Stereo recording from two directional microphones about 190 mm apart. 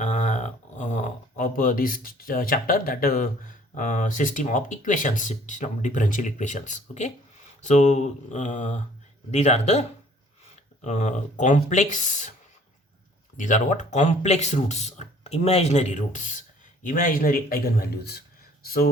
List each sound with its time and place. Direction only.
0.0 s speech: 40° left (ahead or behind)
13.3 s speech: 40° left (ahead or behind)